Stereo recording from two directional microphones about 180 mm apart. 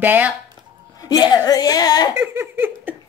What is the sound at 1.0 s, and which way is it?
A woman's voice, 20° left (ahead or behind).